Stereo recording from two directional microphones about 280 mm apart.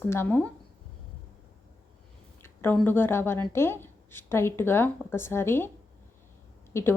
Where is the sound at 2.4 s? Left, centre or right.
Centre.